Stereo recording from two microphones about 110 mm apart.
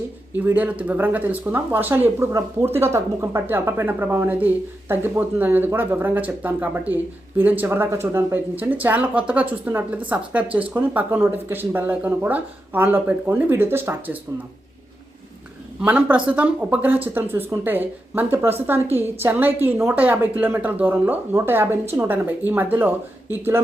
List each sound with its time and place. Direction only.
0.3 s speech: 15° right (ahead or behind)
15.8 s a woman's voice: 15° right (ahead or behind)